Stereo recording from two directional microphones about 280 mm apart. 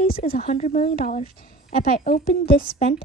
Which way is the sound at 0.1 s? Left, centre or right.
Left.